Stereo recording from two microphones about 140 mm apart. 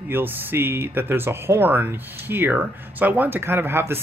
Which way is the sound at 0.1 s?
15° right (ahead or behind).